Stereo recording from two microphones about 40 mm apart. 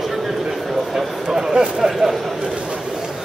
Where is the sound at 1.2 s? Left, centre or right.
Centre.